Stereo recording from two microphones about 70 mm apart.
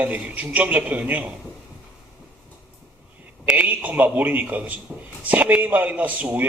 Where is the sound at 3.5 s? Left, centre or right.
Right.